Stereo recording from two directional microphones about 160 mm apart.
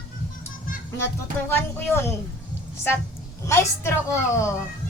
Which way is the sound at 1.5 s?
15° left (ahead or behind).